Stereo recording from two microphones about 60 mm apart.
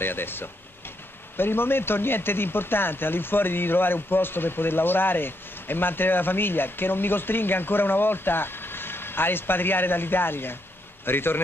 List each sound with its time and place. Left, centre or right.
0.0 s speech: left